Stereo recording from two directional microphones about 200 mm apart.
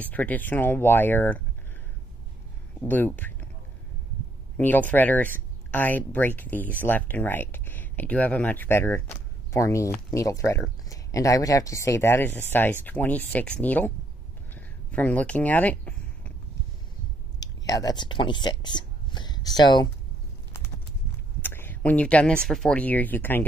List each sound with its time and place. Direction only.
0.0 s speech: 10° left (ahead or behind)
2.8 s speech: 10° left (ahead or behind)
4.6 s speech: 10° left (ahead or behind)
14.5 s a sound: 5° left (ahead or behind)
17.4 s speech: 20° left (ahead or behind)
21.4 s speech: 10° left (ahead or behind)